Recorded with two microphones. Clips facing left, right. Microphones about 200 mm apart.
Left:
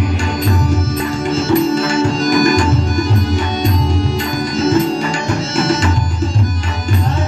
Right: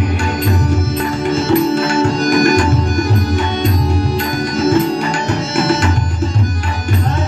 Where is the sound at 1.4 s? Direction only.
60° right (ahead or behind).